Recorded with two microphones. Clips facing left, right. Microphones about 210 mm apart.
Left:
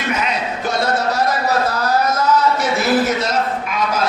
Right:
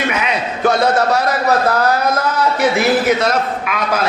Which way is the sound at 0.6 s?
60° right (ahead or behind).